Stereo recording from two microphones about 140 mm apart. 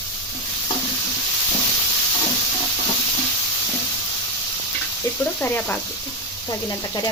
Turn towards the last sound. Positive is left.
turn(degrees=15)  # may be behind; listen again after turning